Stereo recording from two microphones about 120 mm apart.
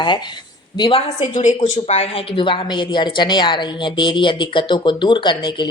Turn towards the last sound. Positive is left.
turn(degrees=40)  # may be behind; listen again after turning